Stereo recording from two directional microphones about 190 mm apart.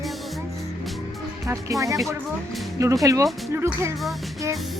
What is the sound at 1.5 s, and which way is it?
Speech, 15° right (ahead or behind).